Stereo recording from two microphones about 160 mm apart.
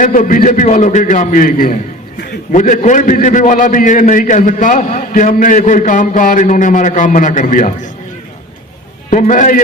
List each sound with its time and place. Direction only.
0.0 s a man's voice: 55° left (ahead or behind)
9.0 s a man's voice: 50° left (ahead or behind)